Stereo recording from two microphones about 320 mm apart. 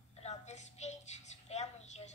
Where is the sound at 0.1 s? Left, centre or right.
Left.